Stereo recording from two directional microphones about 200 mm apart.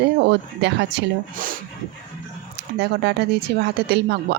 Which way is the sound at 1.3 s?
45° right (ahead or behind).